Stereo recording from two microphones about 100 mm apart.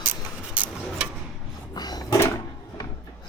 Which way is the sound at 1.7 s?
45° left (ahead or behind).